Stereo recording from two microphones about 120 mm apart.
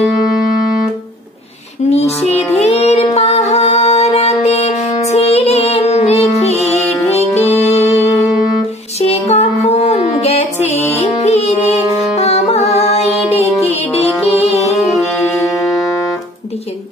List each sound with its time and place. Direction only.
1.9 s music: 60° left (ahead or behind)
9.0 s music: 60° left (ahead or behind)
15.3 s music: 25° left (ahead or behind)